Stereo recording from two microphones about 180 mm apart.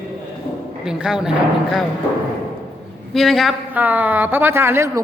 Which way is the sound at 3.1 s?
Centre (ahead or behind).